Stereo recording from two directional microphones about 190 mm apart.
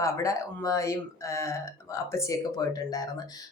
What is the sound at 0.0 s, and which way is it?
A woman's voice, 15° left (ahead or behind).